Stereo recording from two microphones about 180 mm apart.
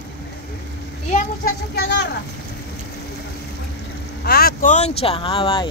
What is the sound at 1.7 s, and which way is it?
Speech, 70° left (ahead or behind).